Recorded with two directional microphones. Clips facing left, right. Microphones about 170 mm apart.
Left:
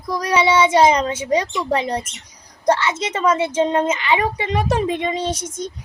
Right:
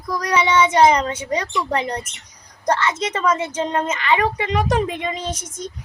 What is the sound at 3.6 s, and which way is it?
A child's voice, 20° left (ahead or behind).